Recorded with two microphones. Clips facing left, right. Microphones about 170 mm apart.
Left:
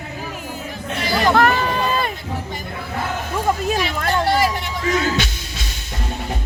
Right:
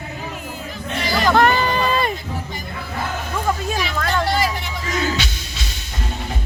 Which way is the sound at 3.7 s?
50° left (ahead or behind).